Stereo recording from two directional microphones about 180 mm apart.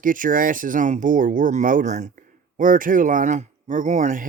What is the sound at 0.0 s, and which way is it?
Speech, 50° right (ahead or behind).